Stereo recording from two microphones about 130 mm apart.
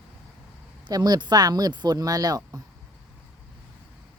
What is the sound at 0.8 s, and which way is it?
Speech, 30° right (ahead or behind).